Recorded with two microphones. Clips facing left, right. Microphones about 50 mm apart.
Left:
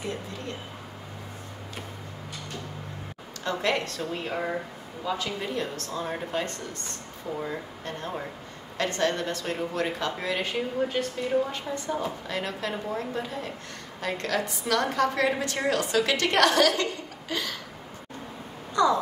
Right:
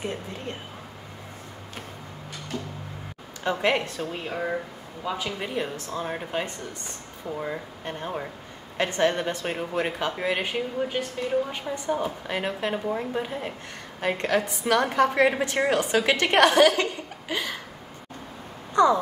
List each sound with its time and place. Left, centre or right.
0.0 s a woman's voice: right
3.4 s a woman's voice: right
4.3 s speech: centre
5.0 s a woman's voice: centre
10.5 s a woman's voice: centre
18.8 s a woman's voice: right